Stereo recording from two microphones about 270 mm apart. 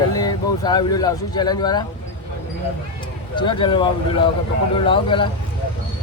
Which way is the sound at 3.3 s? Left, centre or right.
Centre.